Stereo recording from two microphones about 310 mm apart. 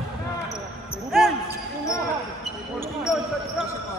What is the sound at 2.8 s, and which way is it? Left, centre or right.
Basketball bounce, centre.